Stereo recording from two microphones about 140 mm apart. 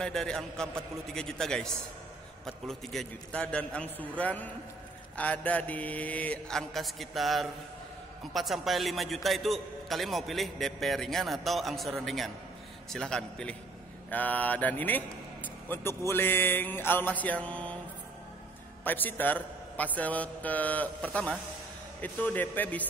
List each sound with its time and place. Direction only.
0.0 s a man's voice: 5° left (ahead or behind)
18.9 s speech: 15° left (ahead or behind)